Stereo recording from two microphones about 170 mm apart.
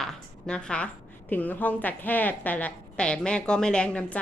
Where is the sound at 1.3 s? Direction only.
10° left (ahead or behind).